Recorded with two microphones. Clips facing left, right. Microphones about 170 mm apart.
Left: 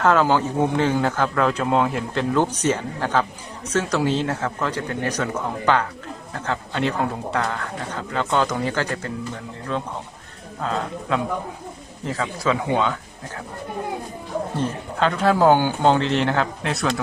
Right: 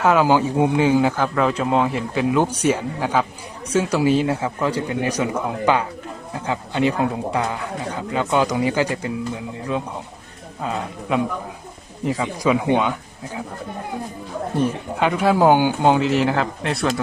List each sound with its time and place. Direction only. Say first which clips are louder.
0.0 s speech: right 2 dB; 10° right (ahead or behind)
14.6 s speech: right 3 dB; 10° right (ahead or behind)